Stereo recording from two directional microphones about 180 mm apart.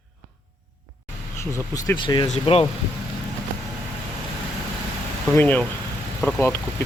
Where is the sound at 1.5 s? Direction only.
20° left (ahead or behind).